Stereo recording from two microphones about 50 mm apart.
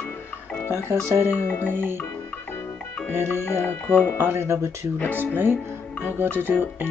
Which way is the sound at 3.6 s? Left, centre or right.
Left.